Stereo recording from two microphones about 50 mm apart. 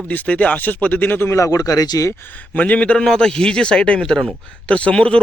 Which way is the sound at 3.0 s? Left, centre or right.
Centre.